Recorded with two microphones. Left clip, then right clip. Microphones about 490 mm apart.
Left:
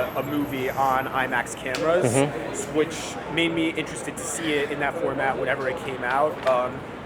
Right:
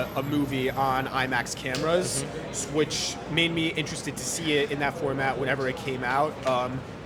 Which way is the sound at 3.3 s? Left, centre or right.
Right.